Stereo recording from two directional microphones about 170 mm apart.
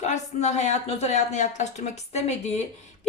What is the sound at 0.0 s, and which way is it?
A woman's voice, 40° left (ahead or behind).